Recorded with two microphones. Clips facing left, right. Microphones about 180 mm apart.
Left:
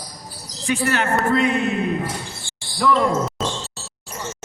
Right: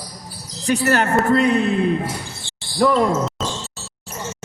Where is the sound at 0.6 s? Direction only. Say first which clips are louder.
Right 3 dB; 40° right (ahead or behind).